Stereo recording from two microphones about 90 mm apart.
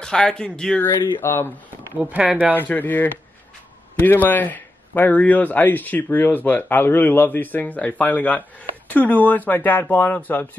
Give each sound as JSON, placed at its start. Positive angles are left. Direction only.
{"t": 0.0, "sound": "speech", "side_deg": 10}
{"t": 0.8, "sound": "speech", "side_deg": 25}
{"t": 2.0, "sound": "speech", "side_deg": -15}
{"t": 2.7, "sound": "speech", "side_deg": 20}